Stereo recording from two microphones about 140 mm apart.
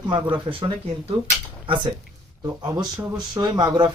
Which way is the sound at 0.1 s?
35° right (ahead or behind).